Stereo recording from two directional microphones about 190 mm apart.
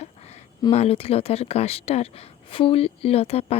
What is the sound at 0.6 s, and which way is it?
Speech, 30° left (ahead or behind).